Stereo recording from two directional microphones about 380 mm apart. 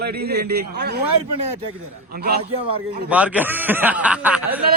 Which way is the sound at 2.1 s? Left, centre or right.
Right.